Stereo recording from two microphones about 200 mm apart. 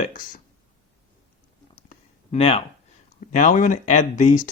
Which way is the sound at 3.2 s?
40° left (ahead or behind).